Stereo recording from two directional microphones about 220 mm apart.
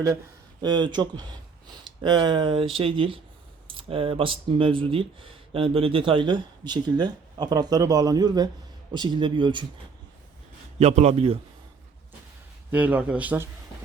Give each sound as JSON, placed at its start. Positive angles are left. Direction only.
{"t": 0.6, "sound": "speech", "side_deg": -20}
{"t": 10.8, "sound": "speech", "side_deg": -30}
{"t": 12.7, "sound": "a man's voice", "side_deg": -5}